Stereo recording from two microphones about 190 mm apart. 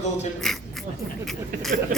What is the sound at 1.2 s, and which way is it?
Speech, centre (ahead or behind).